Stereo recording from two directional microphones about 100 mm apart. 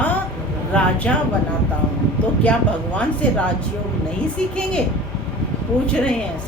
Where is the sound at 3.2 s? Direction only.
15° left (ahead or behind).